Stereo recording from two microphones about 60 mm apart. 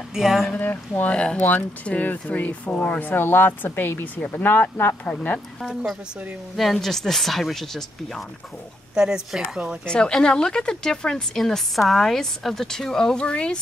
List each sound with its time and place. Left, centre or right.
0.1 s speech: centre
0.5 s speech: left
1.1 s speech: centre
1.9 s speech: left
5.0 s speech: left
6.5 s speech: centre
8.9 s speech: centre
9.8 s speech: centre